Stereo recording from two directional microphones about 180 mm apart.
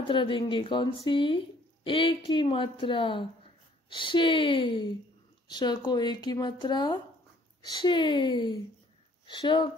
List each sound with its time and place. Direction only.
0.0 s speech: 30° left (ahead or behind)